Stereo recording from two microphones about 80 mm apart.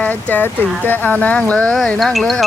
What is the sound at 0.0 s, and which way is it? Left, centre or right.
Speech, left.